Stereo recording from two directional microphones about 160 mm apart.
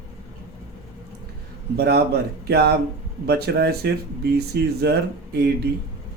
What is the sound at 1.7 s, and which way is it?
Speech, 85° right.